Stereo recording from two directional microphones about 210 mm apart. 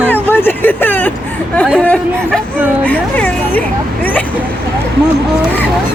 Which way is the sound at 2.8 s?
5° left (ahead or behind).